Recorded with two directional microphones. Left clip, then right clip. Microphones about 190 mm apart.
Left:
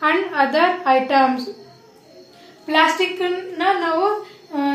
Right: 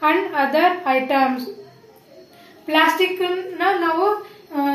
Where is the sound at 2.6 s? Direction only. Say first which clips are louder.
Even; 10° left (ahead or behind).